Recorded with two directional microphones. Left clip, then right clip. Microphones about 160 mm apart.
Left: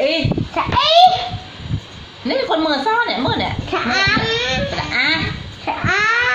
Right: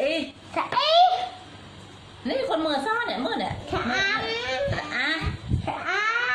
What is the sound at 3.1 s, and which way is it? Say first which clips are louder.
Chuckle: left 8 dB; 20° right (ahead or behind).